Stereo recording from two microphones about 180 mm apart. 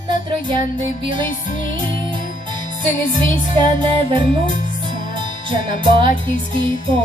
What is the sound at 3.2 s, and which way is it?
Music, 25° right (ahead or behind).